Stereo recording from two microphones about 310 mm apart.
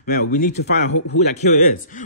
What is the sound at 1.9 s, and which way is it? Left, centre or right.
Speech, left.